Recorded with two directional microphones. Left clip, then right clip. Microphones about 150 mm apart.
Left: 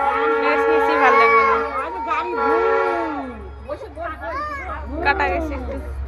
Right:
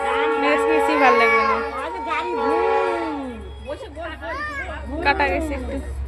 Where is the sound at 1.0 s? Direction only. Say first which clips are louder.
Left 1 dB; 60° right (ahead or behind).